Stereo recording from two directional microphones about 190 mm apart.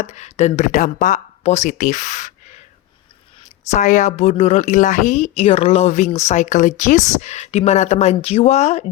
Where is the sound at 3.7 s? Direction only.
40° left (ahead or behind).